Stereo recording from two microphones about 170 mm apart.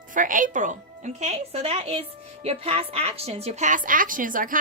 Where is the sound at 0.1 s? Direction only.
50° right (ahead or behind).